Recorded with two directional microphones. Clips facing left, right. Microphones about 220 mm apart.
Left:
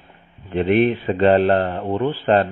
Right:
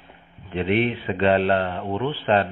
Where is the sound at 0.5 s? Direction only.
50° left (ahead or behind).